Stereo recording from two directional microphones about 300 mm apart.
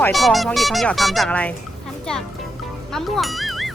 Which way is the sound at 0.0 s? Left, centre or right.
Centre.